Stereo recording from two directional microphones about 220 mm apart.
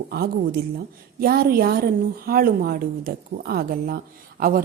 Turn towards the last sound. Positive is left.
turn(degrees=-40)  # may be behind; listen again after turning